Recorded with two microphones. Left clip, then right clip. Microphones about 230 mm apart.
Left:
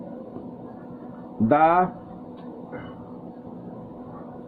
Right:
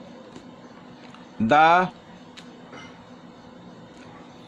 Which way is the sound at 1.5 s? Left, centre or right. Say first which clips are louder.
Right 2 dB; right.